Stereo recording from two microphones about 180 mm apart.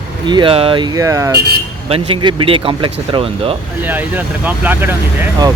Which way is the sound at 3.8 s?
10° right (ahead or behind).